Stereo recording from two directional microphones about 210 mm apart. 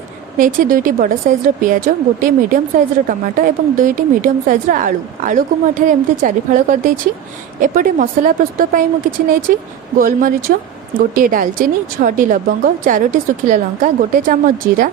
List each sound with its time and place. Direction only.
0.3 s a woman's voice: 40° right (ahead or behind)